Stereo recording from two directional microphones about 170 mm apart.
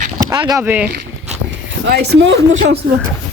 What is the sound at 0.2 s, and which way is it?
Speech, 20° right (ahead or behind).